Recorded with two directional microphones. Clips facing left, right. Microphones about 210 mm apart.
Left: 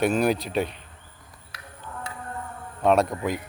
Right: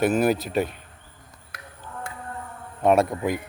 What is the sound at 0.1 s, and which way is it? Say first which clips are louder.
Speech: right 1 dB; 5° right (ahead or behind).